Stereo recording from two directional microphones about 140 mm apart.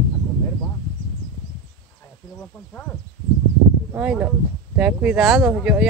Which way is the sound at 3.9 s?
10° right (ahead or behind).